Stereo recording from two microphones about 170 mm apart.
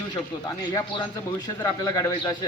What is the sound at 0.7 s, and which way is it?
Speech, 25° left (ahead or behind).